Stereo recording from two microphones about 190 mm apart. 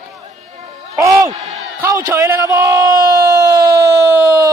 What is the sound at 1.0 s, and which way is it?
Speech, 20° right (ahead or behind).